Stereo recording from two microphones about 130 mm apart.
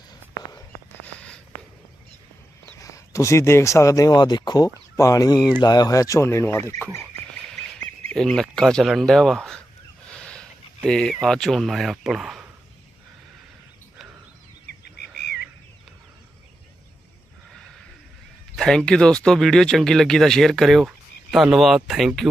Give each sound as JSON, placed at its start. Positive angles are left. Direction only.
{"t": 1.0, "sound": "a sound", "side_deg": 10}
{"t": 2.7, "sound": "speech", "side_deg": 25}
{"t": 8.1, "sound": "speech", "side_deg": 5}
{"t": 18.5, "sound": "speech", "side_deg": 5}